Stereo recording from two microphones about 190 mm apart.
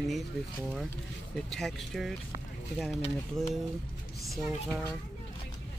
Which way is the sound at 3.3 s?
Centre (ahead or behind).